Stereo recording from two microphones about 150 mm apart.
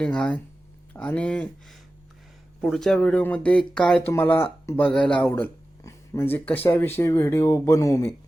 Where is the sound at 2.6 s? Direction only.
Centre (ahead or behind).